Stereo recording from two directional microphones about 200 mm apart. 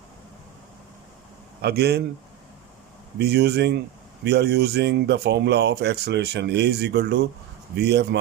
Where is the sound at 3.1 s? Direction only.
55° right (ahead or behind).